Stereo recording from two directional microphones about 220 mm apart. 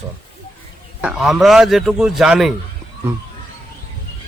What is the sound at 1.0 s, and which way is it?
A man's voice, 5° right (ahead or behind).